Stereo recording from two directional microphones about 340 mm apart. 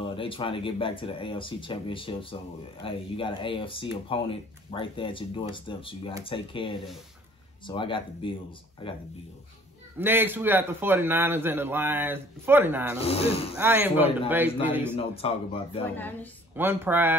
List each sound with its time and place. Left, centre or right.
0.1 s speech: centre
9.9 s a man's voice: centre
13.0 s speech: centre
13.6 s a man's voice: centre
15.0 s speech: centre
15.8 s a man's voice: centre
16.5 s a man's voice: centre